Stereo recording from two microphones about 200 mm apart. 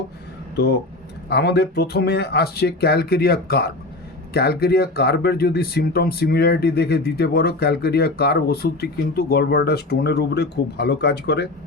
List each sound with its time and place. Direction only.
0.5 s speech: 55° left (ahead or behind)